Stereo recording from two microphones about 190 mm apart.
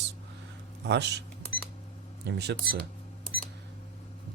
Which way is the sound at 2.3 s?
60° right (ahead or behind).